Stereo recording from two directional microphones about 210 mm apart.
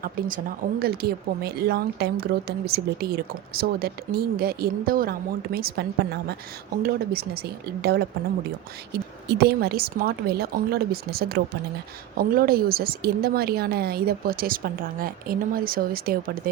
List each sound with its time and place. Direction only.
0.0 s speech: 45° right (ahead or behind)
6.8 s speech: 45° right (ahead or behind)
9.3 s speech: 50° right (ahead or behind)